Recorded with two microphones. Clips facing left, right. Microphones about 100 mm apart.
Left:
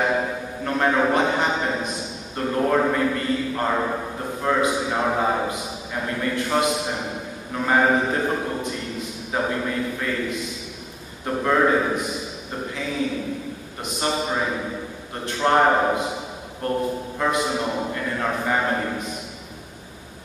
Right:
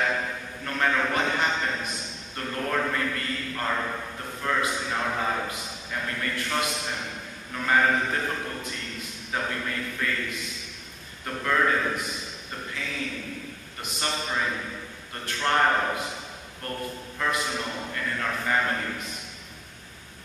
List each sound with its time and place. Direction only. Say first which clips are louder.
0.0 s a sound: left 5 dB; 20° left (ahead or behind)
2.3 s a man's voice: left 8 dB; 20° left (ahead or behind)
4.6 s a man's voice: left 6 dB; 10° left (ahead or behind)
6.5 s a man's voice: left 8 dB; 30° left (ahead or behind)
11.2 s a man's voice: left 5 dB; 25° left (ahead or behind)
12.7 s a sound: left 6 dB; 20° left (ahead or behind)
14.1 s a man's voice: left 3 dB; 15° left (ahead or behind)